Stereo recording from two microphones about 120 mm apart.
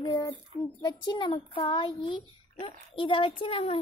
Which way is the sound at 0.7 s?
40° left (ahead or behind).